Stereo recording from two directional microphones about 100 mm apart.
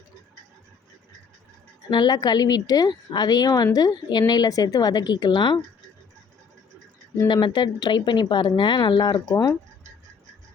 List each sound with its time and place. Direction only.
1.9 s a woman's voice: 45° left (ahead or behind)
7.3 s a woman's voice: 50° left (ahead or behind)